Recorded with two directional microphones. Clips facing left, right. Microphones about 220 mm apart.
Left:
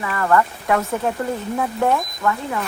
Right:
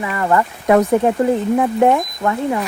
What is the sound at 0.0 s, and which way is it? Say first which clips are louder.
Speech: right 1 dB; 20° right (ahead or behind).